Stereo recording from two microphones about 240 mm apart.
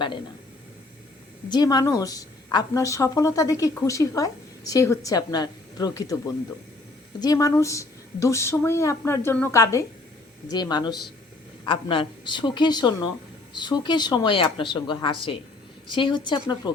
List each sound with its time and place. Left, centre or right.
1.5 s a woman's voice: centre